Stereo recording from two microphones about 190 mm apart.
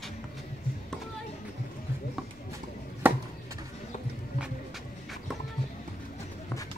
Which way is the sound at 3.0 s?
10° right (ahead or behind).